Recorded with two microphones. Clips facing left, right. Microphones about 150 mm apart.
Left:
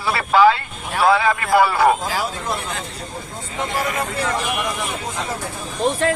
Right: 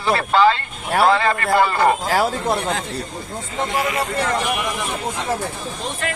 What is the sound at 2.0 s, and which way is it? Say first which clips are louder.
Speech: right 5 dB; 55° right (ahead or behind).